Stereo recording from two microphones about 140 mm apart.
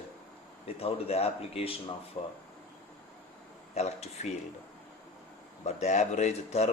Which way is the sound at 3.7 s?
50° left (ahead or behind).